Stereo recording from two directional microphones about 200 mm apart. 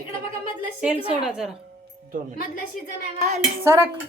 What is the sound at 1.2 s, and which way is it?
Speech, 5° right (ahead or behind).